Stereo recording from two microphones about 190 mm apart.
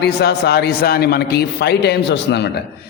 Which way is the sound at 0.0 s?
60° left (ahead or behind).